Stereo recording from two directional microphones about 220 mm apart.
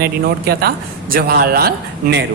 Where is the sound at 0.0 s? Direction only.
45° right (ahead or behind).